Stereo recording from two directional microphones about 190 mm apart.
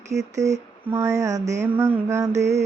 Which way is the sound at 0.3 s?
15° right (ahead or behind).